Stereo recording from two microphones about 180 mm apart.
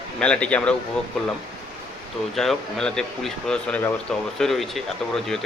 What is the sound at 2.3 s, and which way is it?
Speech, centre (ahead or behind).